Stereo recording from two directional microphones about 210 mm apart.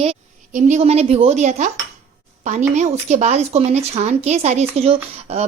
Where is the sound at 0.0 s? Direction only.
30° right (ahead or behind).